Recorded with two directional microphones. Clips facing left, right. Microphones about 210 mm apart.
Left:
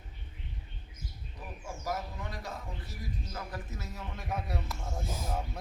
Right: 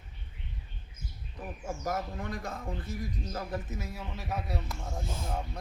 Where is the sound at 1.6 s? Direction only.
50° right (ahead or behind).